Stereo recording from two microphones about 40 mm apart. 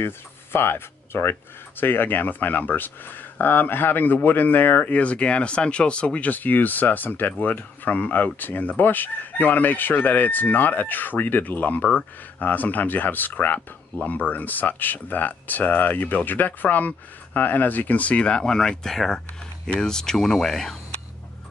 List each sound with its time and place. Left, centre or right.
0.0 s speech: left
1.8 s speech: left
6.3 s speech: left
18.4 s speech: centre